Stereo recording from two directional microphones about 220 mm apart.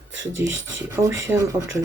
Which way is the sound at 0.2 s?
60° right (ahead or behind).